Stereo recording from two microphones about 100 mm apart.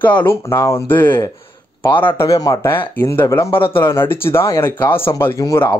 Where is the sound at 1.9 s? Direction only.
55° left (ahead or behind).